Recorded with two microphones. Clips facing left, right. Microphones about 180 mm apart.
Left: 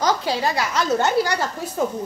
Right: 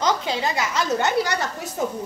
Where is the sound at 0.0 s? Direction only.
20° right (ahead or behind).